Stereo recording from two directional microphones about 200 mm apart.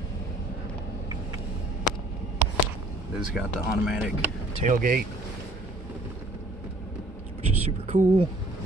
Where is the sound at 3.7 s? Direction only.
5° right (ahead or behind).